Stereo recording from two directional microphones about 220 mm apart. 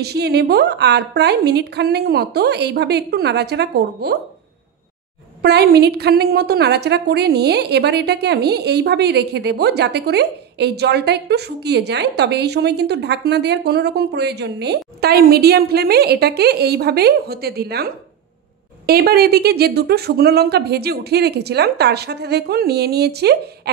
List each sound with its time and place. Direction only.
0.0 s a woman's voice: 50° right (ahead or behind)
5.4 s a woman's voice: 50° right (ahead or behind)